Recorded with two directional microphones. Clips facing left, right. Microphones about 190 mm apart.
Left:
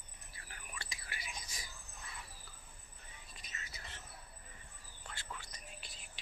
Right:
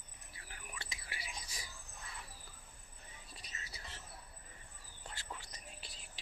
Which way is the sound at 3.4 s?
35° right (ahead or behind).